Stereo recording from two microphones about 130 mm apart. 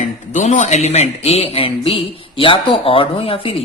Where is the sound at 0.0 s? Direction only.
65° left (ahead or behind).